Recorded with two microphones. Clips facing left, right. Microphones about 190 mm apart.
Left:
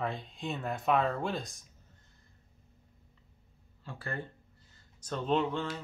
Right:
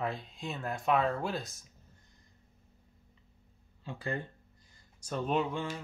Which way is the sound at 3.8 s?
15° right (ahead or behind).